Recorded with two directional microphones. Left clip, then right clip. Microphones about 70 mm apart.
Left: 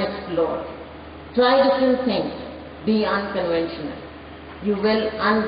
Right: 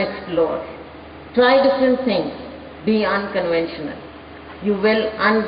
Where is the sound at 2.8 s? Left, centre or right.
Right.